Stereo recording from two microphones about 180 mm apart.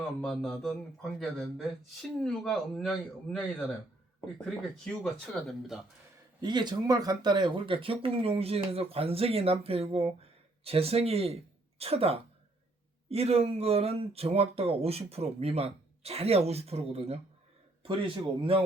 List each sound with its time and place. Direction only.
0.2 s speech: centre (ahead or behind)
4.4 s speech: 5° left (ahead or behind)
6.4 s a man's voice: 25° right (ahead or behind)